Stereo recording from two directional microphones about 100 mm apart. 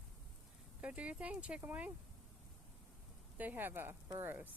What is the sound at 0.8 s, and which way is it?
Speech, 15° right (ahead or behind).